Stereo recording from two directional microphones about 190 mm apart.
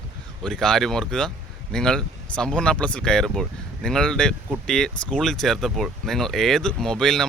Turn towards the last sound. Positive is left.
turn(degrees=0)  # may be behind; listen again after turning